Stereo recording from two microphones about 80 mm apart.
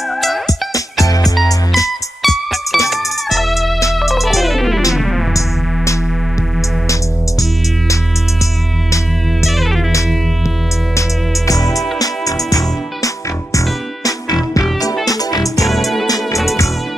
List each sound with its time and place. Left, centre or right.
1.0 s music: left
2.2 s music: centre
11.0 s music: left
15.6 s music: centre